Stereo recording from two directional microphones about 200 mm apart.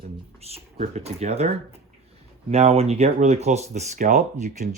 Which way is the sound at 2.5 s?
30° right (ahead or behind).